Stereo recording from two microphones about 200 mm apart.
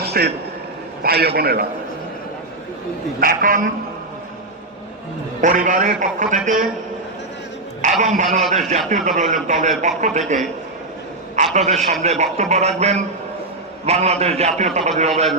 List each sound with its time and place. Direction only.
0.1 s a man's voice: 55° right (ahead or behind)
3.2 s a man's voice: 45° right (ahead or behind)
5.4 s a man's voice: 40° right (ahead or behind)
7.8 s a man's voice: 35° right (ahead or behind)
11.5 s a man's voice: 35° right (ahead or behind)